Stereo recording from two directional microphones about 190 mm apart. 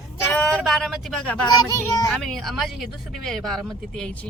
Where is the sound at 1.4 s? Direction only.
20° left (ahead or behind).